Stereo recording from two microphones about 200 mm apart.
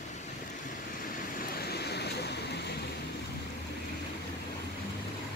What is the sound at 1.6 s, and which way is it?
Waves, 55° left (ahead or behind).